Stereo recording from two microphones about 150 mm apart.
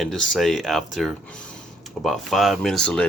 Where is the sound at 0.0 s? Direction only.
5° left (ahead or behind).